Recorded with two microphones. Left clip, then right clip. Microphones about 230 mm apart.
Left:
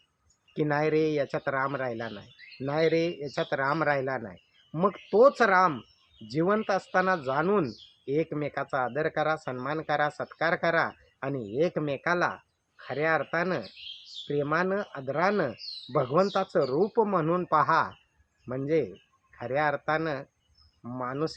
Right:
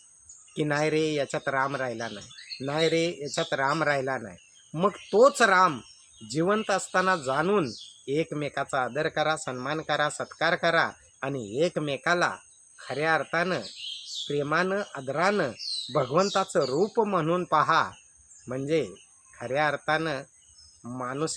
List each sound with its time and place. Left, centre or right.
0.5 s speech: centre